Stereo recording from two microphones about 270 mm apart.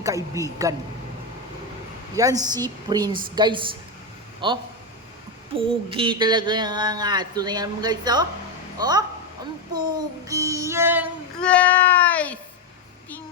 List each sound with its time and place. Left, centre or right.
0.0 s a man's voice: centre
2.1 s a man's voice: centre
11.4 s speech: centre